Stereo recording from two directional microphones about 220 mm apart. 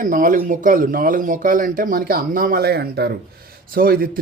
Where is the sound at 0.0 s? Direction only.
35° right (ahead or behind).